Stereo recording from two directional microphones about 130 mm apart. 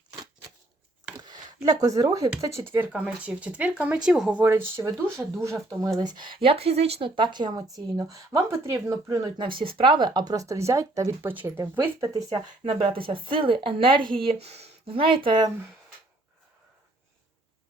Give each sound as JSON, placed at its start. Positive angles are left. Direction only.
{"t": 1.2, "sound": "speech", "side_deg": -35}
{"t": 4.4, "sound": "speech", "side_deg": -20}
{"t": 6.0, "sound": "speech", "side_deg": -35}
{"t": 9.6, "sound": "speech", "side_deg": -40}
{"t": 12.6, "sound": "speech", "side_deg": -45}
{"t": 14.3, "sound": "speech", "side_deg": -50}